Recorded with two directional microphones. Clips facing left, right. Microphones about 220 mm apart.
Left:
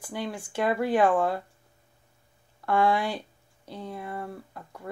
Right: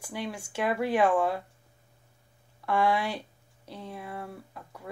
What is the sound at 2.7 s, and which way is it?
Speech, 5° right (ahead or behind).